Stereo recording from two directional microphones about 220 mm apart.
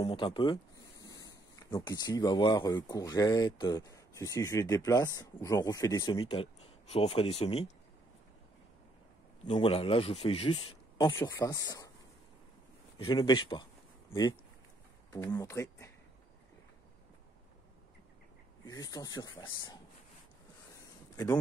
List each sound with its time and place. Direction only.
0.0 s speech: 20° left (ahead or behind)
9.5 s speech: 25° left (ahead or behind)
11.1 s speech: 10° left (ahead or behind)
13.0 s speech: 20° left (ahead or behind)
15.0 s speech: 15° left (ahead or behind)
18.7 s speech: 15° left (ahead or behind)